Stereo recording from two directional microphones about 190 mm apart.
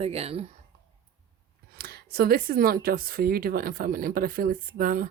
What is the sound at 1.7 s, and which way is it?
Speech, 55° right (ahead or behind).